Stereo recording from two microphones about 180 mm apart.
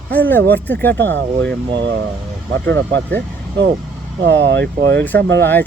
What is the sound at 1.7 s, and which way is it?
Speech, 75° right (ahead or behind).